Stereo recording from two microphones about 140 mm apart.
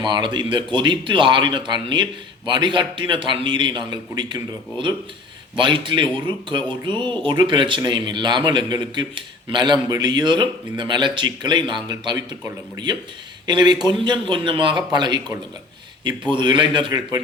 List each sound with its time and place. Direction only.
0.0 s a man's voice: 35° right (ahead or behind)
5.5 s a man's voice: 35° right (ahead or behind)